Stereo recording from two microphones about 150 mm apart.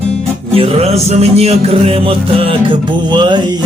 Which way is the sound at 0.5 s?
40° right (ahead or behind).